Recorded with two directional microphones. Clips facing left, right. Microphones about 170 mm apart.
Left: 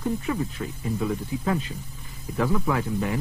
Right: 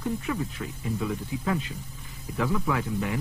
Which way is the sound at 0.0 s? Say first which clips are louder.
Left 3 dB; 35° left (ahead or behind).